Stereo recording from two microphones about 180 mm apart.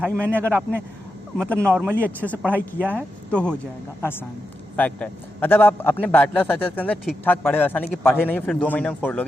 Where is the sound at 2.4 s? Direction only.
10° right (ahead or behind).